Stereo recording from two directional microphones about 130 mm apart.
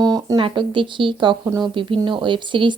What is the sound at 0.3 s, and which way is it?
Speech, 40° right (ahead or behind).